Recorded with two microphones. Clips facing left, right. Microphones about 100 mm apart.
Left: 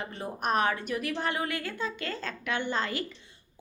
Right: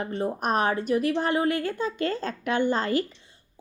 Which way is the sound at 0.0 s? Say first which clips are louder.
Right 6 dB; 35° right (ahead or behind).